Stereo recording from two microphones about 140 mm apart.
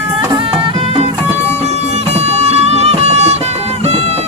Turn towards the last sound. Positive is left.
turn(degrees=-50)  # may be behind; listen again after turning